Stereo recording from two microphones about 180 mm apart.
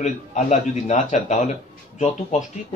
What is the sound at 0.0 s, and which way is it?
A man's voice, 40° left (ahead or behind).